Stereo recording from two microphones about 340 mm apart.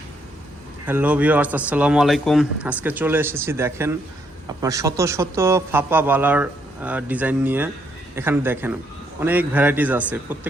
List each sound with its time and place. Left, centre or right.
0.9 s a man's voice: centre